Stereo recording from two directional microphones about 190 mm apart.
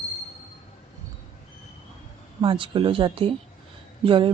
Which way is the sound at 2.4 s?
25° right (ahead or behind).